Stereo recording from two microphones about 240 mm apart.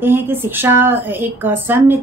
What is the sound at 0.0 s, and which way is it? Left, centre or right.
Speech, centre.